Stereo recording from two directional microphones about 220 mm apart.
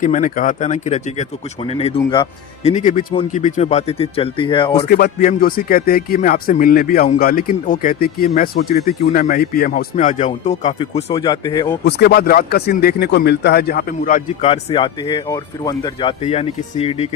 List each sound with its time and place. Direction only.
0.0 s speech: 35° left (ahead or behind)
4.9 s speech: 45° left (ahead or behind); by 11.8 s 15° left (ahead or behind)
11.9 s speech: 50° left (ahead or behind)
14.4 s speech: 25° left (ahead or behind)